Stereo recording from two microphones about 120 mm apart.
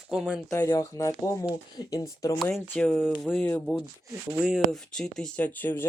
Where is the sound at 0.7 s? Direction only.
25° left (ahead or behind).